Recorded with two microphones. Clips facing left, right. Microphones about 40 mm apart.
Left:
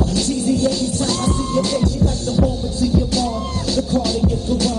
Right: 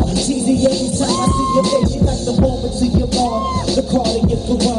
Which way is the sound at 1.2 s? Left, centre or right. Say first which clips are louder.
Right 6 dB; centre.